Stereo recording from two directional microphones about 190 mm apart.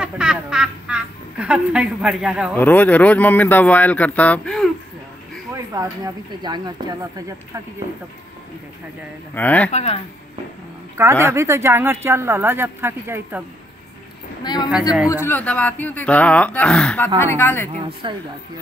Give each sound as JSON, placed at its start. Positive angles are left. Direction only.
{"t": 0.0, "sound": "speech", "side_deg": -5}
{"t": 2.5, "sound": "speech", "side_deg": 10}
{"t": 5.5, "sound": "speech", "side_deg": -20}
{"t": 9.3, "sound": "speech", "side_deg": 10}
{"t": 9.7, "sound": "speech", "side_deg": 35}
{"t": 11.0, "sound": "speech", "side_deg": -15}
{"t": 14.4, "sound": "a man's voice", "side_deg": 20}
{"t": 14.7, "sound": "a man's voice", "side_deg": -5}
{"t": 15.2, "sound": "speech", "side_deg": 10}
{"t": 17.7, "sound": "speech", "side_deg": -30}